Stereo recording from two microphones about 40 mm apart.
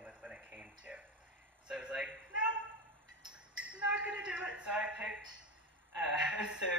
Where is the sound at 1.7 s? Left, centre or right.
Right.